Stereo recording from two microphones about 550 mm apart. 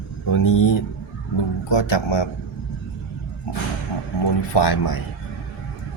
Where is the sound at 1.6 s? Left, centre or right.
Left.